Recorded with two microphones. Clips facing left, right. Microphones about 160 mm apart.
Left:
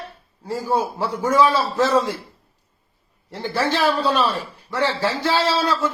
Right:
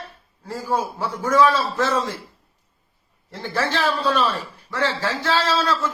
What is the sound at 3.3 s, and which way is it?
A man's voice, 15° left (ahead or behind).